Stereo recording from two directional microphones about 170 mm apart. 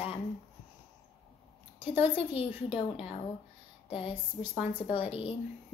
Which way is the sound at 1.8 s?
35° left (ahead or behind).